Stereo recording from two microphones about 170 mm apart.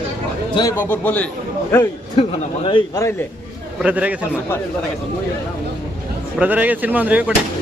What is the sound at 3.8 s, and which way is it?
Speech, 10° right (ahead or behind).